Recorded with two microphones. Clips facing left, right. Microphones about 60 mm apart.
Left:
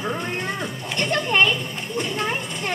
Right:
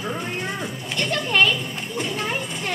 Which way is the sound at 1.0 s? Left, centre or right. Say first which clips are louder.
Left 1 dB; left.